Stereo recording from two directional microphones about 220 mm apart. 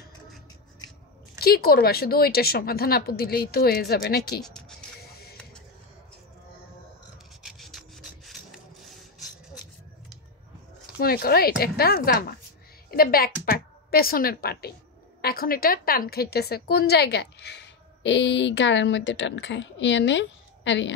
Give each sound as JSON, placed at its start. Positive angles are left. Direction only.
{"t": 1.4, "sound": "a woman's voice", "side_deg": 45}
{"t": 4.4, "sound": "music", "side_deg": 5}
{"t": 5.0, "sound": "a sound", "side_deg": 45}
{"t": 7.4, "sound": "filing", "side_deg": 0}
{"t": 11.0, "sound": "a woman's voice", "side_deg": 45}